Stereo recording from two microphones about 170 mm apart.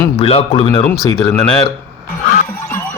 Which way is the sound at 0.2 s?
35° left (ahead or behind).